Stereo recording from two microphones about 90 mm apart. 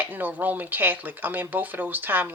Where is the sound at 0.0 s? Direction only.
20° right (ahead or behind).